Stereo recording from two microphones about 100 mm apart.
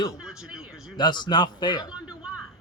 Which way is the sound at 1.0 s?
50° left (ahead or behind).